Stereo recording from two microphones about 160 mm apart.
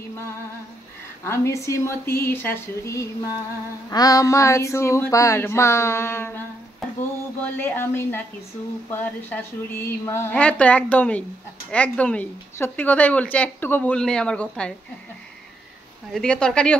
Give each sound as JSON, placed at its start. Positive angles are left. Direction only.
{"t": 1.2, "sound": "a woman's voice", "side_deg": 15}
{"t": 7.4, "sound": "a woman's voice", "side_deg": 10}
{"t": 16.1, "sound": "speech", "side_deg": 5}